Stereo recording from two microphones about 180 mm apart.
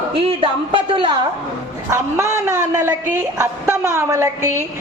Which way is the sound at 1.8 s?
15° right (ahead or behind).